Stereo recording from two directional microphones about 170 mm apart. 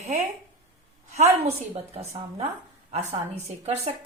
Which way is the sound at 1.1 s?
40° right (ahead or behind).